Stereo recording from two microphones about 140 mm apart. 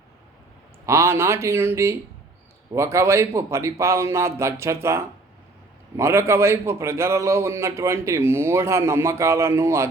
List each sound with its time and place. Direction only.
0.9 s a man's voice: 20° right (ahead or behind)